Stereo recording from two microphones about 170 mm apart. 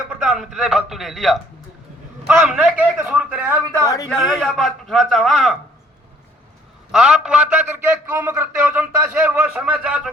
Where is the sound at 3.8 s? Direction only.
20° left (ahead or behind).